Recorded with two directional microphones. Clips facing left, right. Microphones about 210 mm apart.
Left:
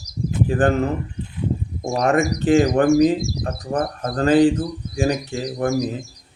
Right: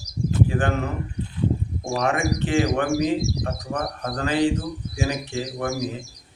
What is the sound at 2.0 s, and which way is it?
Speech, 40° left (ahead or behind).